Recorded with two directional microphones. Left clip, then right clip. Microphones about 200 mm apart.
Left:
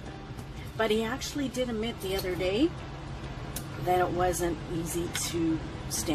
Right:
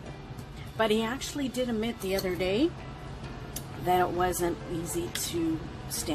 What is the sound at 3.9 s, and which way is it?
Speech, 15° right (ahead or behind).